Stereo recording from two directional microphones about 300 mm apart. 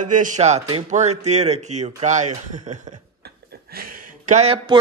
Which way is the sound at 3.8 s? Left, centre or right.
Right.